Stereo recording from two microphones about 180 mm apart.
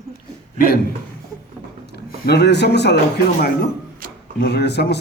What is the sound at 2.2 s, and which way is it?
Speech, 65° left (ahead or behind).